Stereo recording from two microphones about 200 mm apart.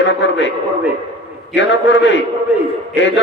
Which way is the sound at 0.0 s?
65° left (ahead or behind).